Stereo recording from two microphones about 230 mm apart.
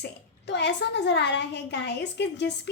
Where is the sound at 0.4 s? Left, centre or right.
Left.